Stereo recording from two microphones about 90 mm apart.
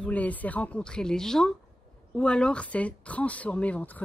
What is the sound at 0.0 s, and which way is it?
Speech, 15° left (ahead or behind).